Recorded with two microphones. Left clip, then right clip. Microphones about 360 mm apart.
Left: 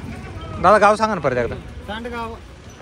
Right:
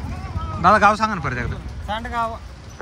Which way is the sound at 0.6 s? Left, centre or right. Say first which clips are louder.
Left 1 dB; centre.